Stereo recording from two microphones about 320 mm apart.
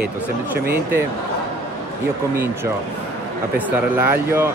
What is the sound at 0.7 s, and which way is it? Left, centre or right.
Speech, centre.